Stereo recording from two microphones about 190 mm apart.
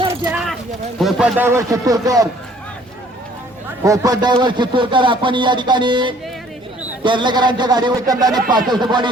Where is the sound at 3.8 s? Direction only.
20° right (ahead or behind).